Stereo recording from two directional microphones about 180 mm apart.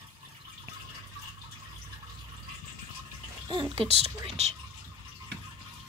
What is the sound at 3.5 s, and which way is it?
A woman's voice, 30° right (ahead or behind).